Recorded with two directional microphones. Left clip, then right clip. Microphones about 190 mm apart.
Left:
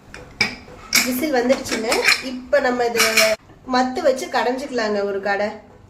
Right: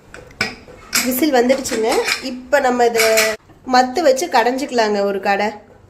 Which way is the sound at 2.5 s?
45° right (ahead or behind).